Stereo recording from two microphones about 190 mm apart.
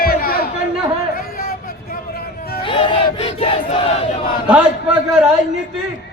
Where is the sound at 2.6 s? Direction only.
25° left (ahead or behind).